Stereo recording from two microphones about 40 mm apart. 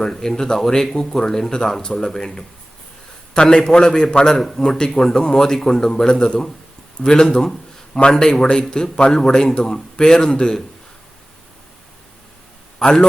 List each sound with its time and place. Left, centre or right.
0.0 s a man's voice: centre
12.8 s a man's voice: centre